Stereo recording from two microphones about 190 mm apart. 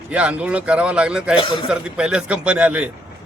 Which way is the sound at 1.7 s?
5° right (ahead or behind).